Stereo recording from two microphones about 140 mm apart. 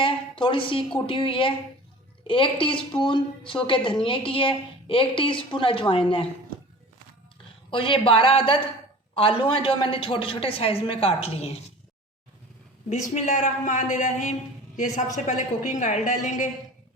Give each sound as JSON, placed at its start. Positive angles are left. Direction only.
{"t": 0.0, "sound": "a woman's voice", "side_deg": 40}
{"t": 7.7, "sound": "a woman's voice", "side_deg": 40}
{"t": 12.9, "sound": "a woman's voice", "side_deg": 60}